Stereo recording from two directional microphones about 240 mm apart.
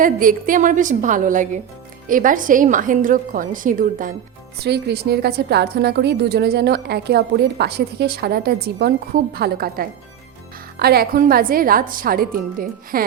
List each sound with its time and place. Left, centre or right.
0.0 s a woman's voice: right